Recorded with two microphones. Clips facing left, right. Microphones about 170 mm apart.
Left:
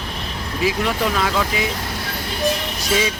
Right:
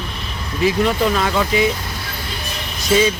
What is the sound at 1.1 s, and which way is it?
Speech, centre (ahead or behind).